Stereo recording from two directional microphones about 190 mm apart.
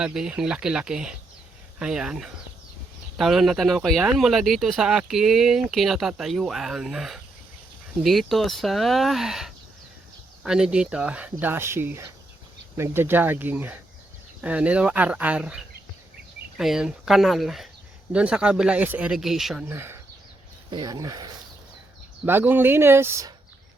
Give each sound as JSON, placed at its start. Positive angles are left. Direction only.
{"t": 0.0, "sound": "speech", "side_deg": -5}
{"t": 19.6, "sound": "speech", "side_deg": -10}